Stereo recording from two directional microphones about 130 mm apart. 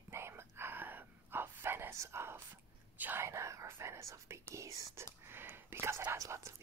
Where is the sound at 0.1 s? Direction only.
20° right (ahead or behind).